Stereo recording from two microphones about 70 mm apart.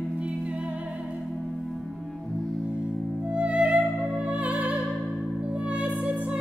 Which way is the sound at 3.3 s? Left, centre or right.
Centre.